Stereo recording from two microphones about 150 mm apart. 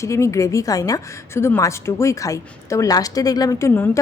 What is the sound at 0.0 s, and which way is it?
A woman's voice, 20° left (ahead or behind).